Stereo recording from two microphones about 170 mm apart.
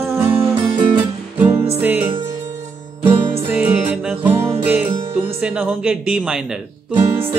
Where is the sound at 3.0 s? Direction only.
30° right (ahead or behind).